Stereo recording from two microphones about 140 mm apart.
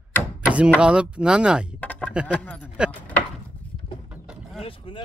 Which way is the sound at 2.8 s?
5° right (ahead or behind).